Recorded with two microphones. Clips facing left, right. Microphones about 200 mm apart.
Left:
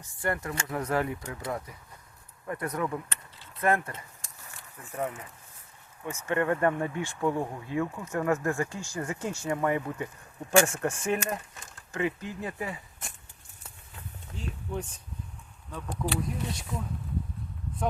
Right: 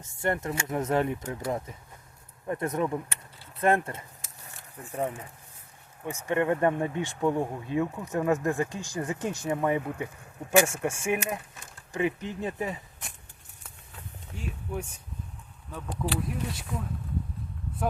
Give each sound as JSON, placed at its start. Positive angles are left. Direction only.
{"t": 0.0, "sound": "speech", "side_deg": -25}
{"t": 4.2, "sound": "a sound", "side_deg": -5}
{"t": 6.1, "sound": "speech", "side_deg": -15}
{"t": 14.3, "sound": "speech", "side_deg": -10}
{"t": 16.0, "sound": "speech", "side_deg": 0}